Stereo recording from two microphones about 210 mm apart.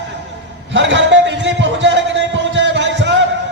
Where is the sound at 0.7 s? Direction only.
60° right (ahead or behind).